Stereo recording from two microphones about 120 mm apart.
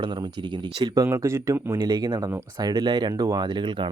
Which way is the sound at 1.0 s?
25° right (ahead or behind).